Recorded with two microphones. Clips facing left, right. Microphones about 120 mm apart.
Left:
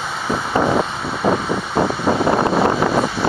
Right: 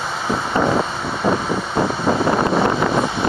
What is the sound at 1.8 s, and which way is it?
Wind noise, 5° left (ahead or behind).